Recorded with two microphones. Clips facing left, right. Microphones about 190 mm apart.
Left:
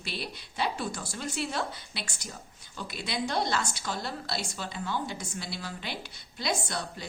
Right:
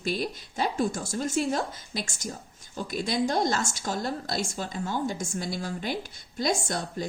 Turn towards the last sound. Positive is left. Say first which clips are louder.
# right 4 dB
turn(degrees=-45)  # may be behind; listen again after turning